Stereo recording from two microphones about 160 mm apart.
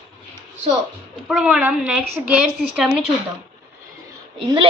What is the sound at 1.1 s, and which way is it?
A woman's voice, 5° right (ahead or behind).